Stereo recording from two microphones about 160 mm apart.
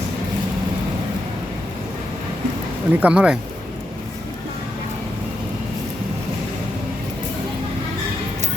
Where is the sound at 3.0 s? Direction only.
5° right (ahead or behind).